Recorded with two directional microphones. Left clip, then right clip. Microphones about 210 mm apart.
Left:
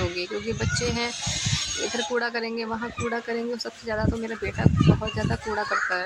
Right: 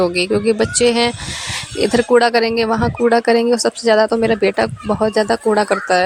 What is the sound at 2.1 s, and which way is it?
A woman's voice, 45° right (ahead or behind).